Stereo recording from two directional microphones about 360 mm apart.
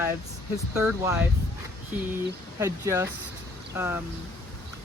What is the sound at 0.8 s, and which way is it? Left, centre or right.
Speech, centre.